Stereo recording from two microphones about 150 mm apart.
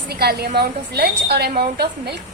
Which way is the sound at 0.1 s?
90° right.